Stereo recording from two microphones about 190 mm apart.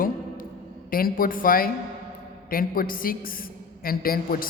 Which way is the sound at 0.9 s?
50° left (ahead or behind).